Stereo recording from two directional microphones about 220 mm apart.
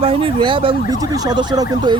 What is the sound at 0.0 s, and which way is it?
Speech, 25° right (ahead or behind).